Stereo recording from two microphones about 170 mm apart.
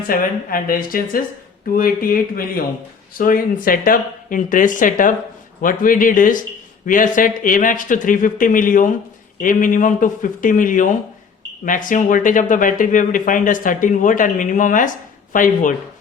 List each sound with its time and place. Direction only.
0.1 s speech: 55° left (ahead or behind)